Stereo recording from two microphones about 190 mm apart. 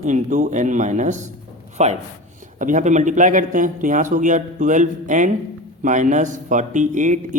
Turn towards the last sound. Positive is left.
turn(degrees=-40)  # may be behind; listen again after turning